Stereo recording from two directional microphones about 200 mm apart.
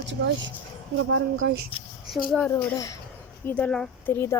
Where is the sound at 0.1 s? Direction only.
65° right (ahead or behind).